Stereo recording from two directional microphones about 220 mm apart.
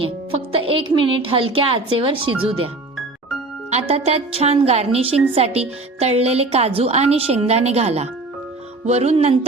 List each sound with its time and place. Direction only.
0.0 s music: 25° right (ahead or behind)
1.2 s a woman's voice: 25° right (ahead or behind)
3.7 s a woman's voice: 30° right (ahead or behind)